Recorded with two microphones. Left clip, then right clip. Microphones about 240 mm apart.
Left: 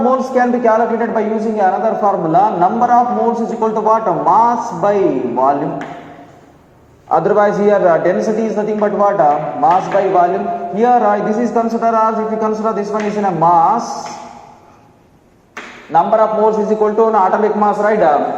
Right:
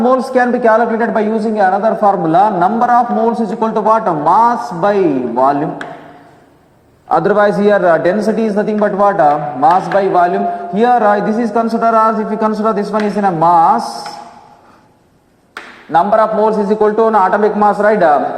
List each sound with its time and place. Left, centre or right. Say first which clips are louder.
0.0 s a man's voice: right 2 dB; right
7.1 s a man's voice: right 1 dB; right
15.9 s a man's voice: right 1 dB; right